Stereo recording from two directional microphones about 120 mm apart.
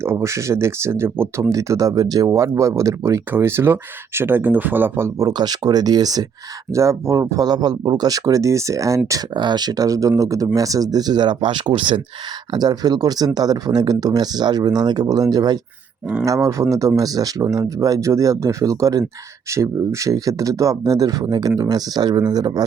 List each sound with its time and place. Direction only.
0.0 s speech: 20° right (ahead or behind)
5.4 s speech: 35° right (ahead or behind)
9.3 s speech: 40° right (ahead or behind)